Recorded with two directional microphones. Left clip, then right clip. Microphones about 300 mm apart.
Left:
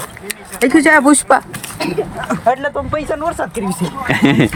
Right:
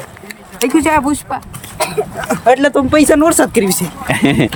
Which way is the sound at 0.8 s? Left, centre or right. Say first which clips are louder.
Left 4 dB; centre.